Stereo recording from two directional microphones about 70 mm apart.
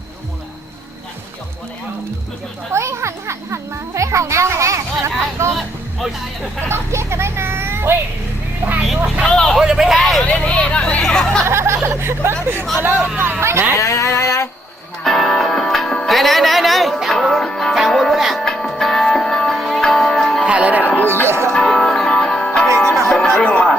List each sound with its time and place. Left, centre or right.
2.7 s children playing: right
6.7 s a sound: right
8.6 s vehicle: right
9.2 s speech: centre
9.6 s speech: centre
10.2 s speech: centre
11.4 s speech: right
13.7 s a sound: left
15.0 s music: centre
20.4 s music: centre
20.8 s music: left
21.2 s music: right
21.5 s music: centre